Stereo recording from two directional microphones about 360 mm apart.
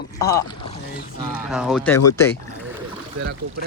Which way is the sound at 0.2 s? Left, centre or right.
Centre.